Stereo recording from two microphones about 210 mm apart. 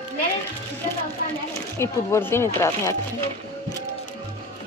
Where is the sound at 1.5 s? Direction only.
10° left (ahead or behind).